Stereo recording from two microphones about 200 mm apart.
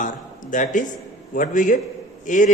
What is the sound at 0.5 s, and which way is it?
A man's voice, 40° left (ahead or behind).